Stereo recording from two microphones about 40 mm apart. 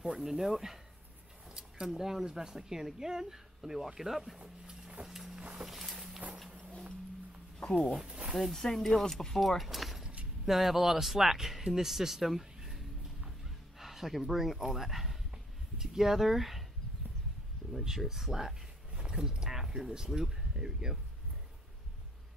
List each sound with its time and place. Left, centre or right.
0.2 s speech: centre
1.5 s a sound: centre
1.9 s speech: centre
4.4 s speech: centre
5.0 s vehicle: centre
5.4 s vehicle: right
5.7 s walk: centre
8.0 s speech: right
8.4 s speech: centre
15.3 s a sound: centre
17.7 s speech: centre